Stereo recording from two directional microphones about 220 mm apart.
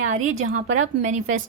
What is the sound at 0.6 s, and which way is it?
Speech, 35° right (ahead or behind).